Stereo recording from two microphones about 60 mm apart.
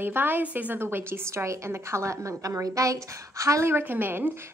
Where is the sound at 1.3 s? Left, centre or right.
Right.